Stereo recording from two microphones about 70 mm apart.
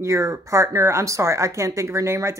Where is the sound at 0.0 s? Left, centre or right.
Right.